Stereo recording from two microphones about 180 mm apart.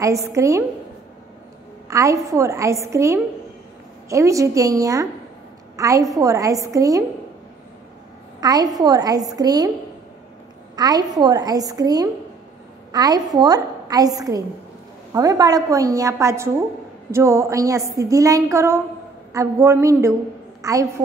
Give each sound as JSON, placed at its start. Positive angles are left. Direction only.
{"t": 0.0, "sound": "a woman's voice", "side_deg": -15}
{"t": 1.9, "sound": "a woman's voice", "side_deg": -15}
{"t": 8.4, "sound": "a woman's voice", "side_deg": -20}
{"t": 10.8, "sound": "a woman's voice", "side_deg": -20}